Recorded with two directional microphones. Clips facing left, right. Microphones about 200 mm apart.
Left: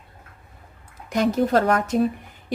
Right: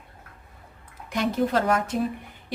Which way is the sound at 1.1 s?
45° left (ahead or behind).